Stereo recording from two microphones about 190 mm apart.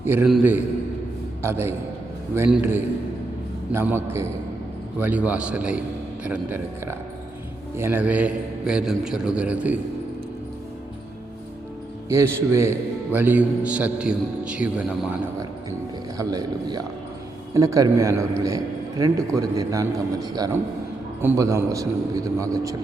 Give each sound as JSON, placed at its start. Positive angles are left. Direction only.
{"t": 0.1, "sound": "a man's voice", "side_deg": -10}
{"t": 12.0, "sound": "a man's voice", "side_deg": -15}
{"t": 16.1, "sound": "a man's voice", "side_deg": -20}